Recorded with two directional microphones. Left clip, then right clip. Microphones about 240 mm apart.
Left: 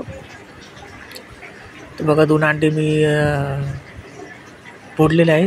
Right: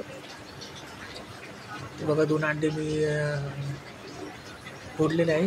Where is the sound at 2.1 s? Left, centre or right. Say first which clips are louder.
Left 11 dB; left.